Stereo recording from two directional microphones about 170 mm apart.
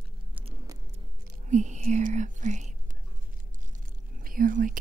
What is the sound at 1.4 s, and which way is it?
Speech, 45° right (ahead or behind).